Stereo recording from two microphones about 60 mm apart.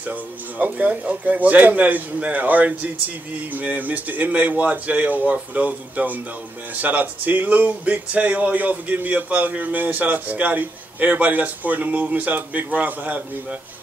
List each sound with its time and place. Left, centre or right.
0.0 s speech: right